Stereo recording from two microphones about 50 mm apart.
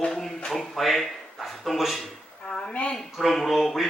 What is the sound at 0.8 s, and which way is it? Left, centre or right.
Speech, centre.